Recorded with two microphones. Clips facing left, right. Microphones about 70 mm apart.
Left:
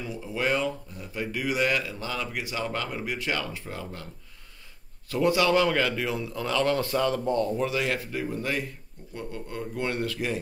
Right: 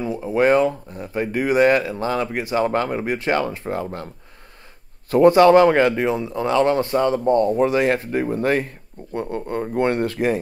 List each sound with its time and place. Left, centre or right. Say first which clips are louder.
0.0 s a man's voice: right 11 dB; right
5.1 s a man's voice: right 11 dB; right